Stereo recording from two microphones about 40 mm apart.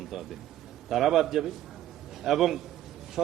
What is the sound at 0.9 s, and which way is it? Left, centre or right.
A man's voice, centre.